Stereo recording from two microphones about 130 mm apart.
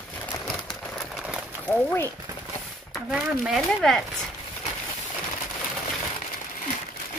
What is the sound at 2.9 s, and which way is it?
Speech, 5° right (ahead or behind).